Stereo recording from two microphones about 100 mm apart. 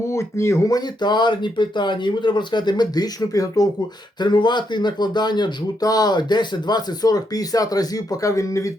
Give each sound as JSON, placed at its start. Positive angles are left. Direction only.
{"t": 0.1, "sound": "speech", "side_deg": 30}
{"t": 1.0, "sound": "speech", "side_deg": 50}
{"t": 4.2, "sound": "speech", "side_deg": 50}